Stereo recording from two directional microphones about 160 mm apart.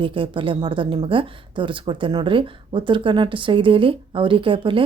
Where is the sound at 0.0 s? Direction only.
30° right (ahead or behind).